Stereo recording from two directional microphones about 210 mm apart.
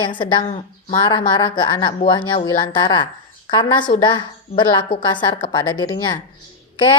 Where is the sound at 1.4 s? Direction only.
20° left (ahead or behind).